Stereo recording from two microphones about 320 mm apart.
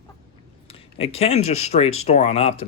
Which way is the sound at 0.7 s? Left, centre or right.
Centre.